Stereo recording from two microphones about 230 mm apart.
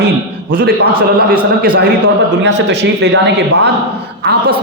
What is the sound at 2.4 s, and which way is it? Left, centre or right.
A woman's voice, right.